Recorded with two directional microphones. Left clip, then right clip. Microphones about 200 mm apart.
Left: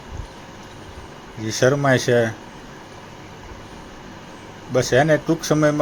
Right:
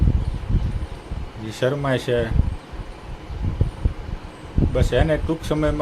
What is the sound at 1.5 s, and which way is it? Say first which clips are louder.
Speech: left 5 dB; 20° left (ahead or behind).